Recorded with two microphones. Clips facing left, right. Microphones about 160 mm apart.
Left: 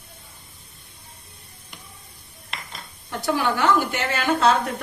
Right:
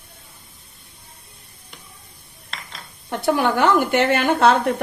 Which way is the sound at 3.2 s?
55° right (ahead or behind).